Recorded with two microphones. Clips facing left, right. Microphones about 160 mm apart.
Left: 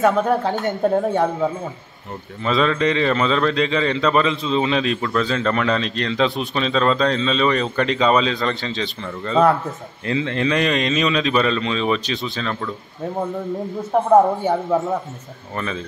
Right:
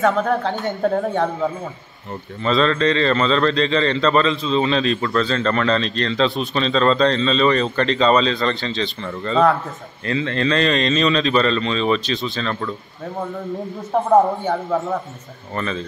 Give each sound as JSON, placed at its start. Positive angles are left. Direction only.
{"t": 0.0, "sound": "a woman's voice", "side_deg": 5}
{"t": 0.8, "sound": "speech", "side_deg": 15}
{"t": 2.4, "sound": "speech", "side_deg": 10}
{"t": 10.0, "sound": "speech", "side_deg": 15}
{"t": 15.5, "sound": "speech", "side_deg": 10}